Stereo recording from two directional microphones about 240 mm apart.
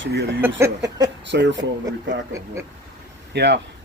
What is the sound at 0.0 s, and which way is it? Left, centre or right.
A man's voice, right.